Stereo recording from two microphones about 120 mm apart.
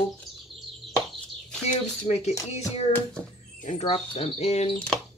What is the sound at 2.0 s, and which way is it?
Speech, 70° left (ahead or behind).